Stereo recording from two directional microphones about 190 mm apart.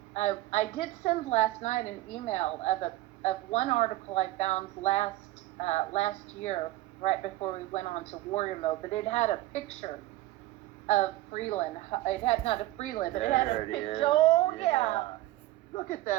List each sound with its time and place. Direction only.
0.1 s a woman's voice: 35° left (ahead or behind)